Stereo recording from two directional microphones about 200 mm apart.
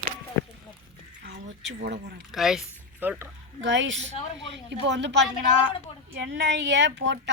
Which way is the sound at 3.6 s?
65° right (ahead or behind).